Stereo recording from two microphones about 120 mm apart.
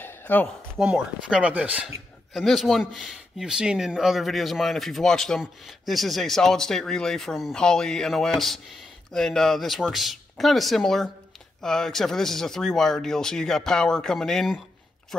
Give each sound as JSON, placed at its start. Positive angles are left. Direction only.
{"t": 0.0, "sound": "a sound", "side_deg": 15}
{"t": 0.9, "sound": "speech", "side_deg": -10}
{"t": 2.3, "sound": "speech", "side_deg": 0}